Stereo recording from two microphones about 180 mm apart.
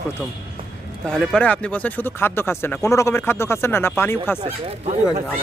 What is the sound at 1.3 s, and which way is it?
Speech, 5° left (ahead or behind).